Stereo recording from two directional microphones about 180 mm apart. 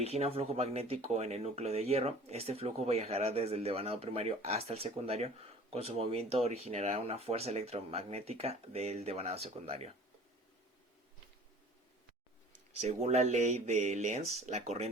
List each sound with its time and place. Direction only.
0.0 s speech: 35° right (ahead or behind)
12.7 s speech: 40° right (ahead or behind)